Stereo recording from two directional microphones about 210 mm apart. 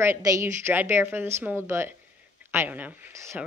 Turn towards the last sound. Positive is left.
turn(degrees=-5)  # may be behind; listen again after turning